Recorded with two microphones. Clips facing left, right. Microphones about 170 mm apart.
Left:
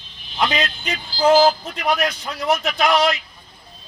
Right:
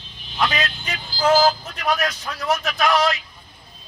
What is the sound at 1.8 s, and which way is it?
Speech, 15° left (ahead or behind).